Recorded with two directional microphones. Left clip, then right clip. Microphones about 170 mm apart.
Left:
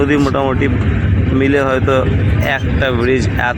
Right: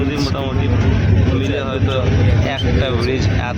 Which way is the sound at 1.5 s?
25° left (ahead or behind).